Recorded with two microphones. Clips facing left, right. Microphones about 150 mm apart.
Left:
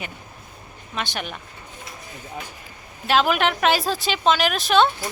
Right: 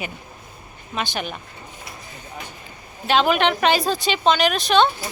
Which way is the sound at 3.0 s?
Centre (ahead or behind).